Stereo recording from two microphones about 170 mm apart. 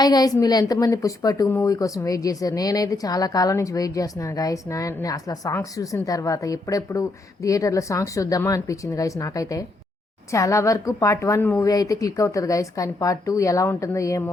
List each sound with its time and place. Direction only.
0.0 s speech: 20° left (ahead or behind)